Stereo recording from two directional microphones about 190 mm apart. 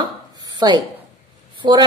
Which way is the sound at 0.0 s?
20° right (ahead or behind).